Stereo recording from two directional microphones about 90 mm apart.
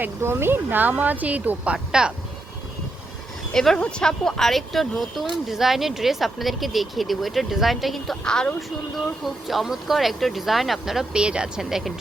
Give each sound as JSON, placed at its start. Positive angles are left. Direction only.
{"t": 0.0, "sound": "speech", "side_deg": -30}
{"t": 3.5, "sound": "speech", "side_deg": 5}